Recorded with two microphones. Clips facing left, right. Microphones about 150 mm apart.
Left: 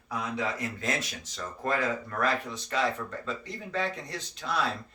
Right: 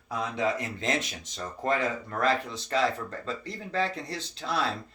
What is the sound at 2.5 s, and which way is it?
Speech, 30° right (ahead or behind).